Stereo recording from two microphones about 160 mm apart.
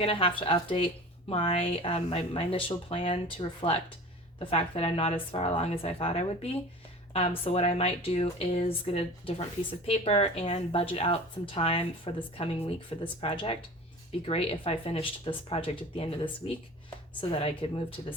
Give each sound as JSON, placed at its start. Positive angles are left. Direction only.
{"t": 0.0, "sound": "speech", "side_deg": 35}